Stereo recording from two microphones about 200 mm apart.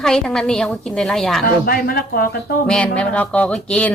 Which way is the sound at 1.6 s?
45° left (ahead or behind).